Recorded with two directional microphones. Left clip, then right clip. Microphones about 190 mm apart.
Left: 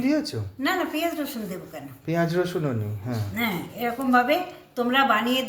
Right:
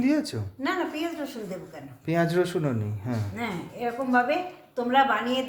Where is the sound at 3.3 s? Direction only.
5° right (ahead or behind).